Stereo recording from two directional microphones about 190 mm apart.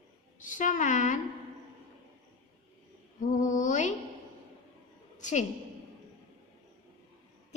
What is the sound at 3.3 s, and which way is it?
Mantra, 40° left (ahead or behind).